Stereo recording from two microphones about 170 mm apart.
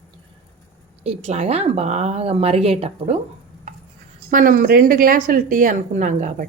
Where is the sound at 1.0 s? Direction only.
40° right (ahead or behind).